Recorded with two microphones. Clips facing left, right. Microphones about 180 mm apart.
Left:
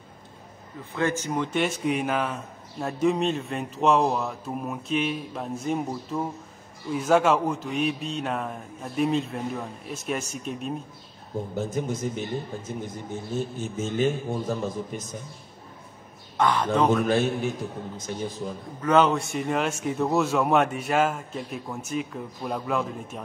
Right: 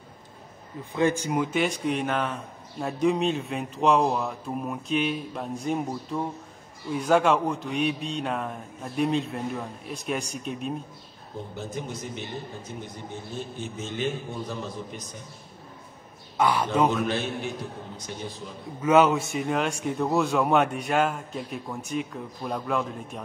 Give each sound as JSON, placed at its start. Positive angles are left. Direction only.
{"t": 0.9, "sound": "speech", "side_deg": -15}
{"t": 11.5, "sound": "a man's voice", "side_deg": 45}
{"t": 16.3, "sound": "a man's voice", "side_deg": -10}
{"t": 17.1, "sound": "a man's voice", "side_deg": 45}
{"t": 18.8, "sound": "speech", "side_deg": -10}